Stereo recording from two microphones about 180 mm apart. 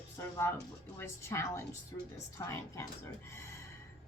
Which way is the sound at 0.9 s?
15° left (ahead or behind).